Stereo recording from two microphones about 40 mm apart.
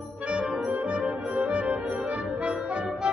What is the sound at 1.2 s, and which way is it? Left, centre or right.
Brass instrument, right.